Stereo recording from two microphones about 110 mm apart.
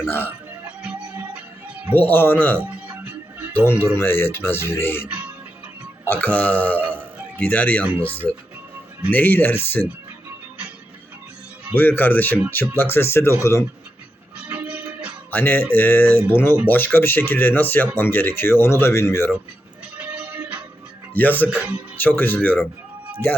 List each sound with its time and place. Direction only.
0.8 s music: 10° right (ahead or behind)
2.0 s speech: 20° left (ahead or behind)
2.6 s music: 10° right (ahead or behind)
3.5 s speech: 20° left (ahead or behind)
5.0 s music: 10° right (ahead or behind)
6.1 s speech: 15° left (ahead or behind)
11.7 s speech: 20° left (ahead or behind)
14.3 s music: 10° right (ahead or behind)
15.3 s speech: 15° left (ahead or behind)
20.0 s music: 10° right (ahead or behind)
21.1 s speech: 15° left (ahead or behind)
21.5 s speech: 15° right (ahead or behind)
21.9 s speech: 15° left (ahead or behind)